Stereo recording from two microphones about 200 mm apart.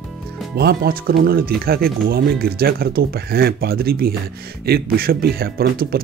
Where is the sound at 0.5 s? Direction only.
50° right (ahead or behind).